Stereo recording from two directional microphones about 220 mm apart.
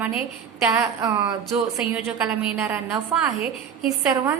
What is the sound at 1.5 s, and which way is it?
A woman's voice, 5° right (ahead or behind).